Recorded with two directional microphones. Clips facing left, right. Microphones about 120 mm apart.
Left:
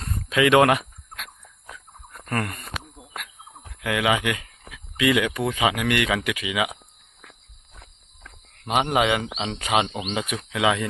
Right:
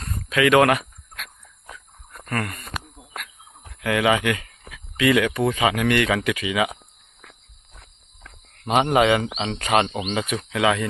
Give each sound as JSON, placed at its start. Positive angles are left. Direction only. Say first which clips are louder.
{"t": 0.0, "sound": "a sound", "louder": "right 1 dB", "side_deg": 20}
{"t": 1.6, "sound": "a sound", "louder": "even", "side_deg": 0}
{"t": 2.3, "sound": "speech", "louder": "even", "side_deg": 25}
{"t": 3.8, "sound": "speech", "louder": "right 3 dB", "side_deg": 10}
{"t": 8.2, "sound": "speech", "louder": "right 4 dB", "side_deg": 5}
{"t": 10.3, "sound": "speech", "louder": "right 1 dB", "side_deg": 10}